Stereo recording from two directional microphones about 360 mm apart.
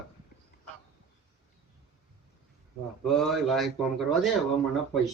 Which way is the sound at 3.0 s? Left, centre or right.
Centre.